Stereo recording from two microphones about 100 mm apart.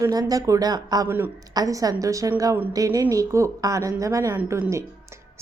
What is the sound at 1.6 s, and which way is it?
A woman's voice, 35° right (ahead or behind).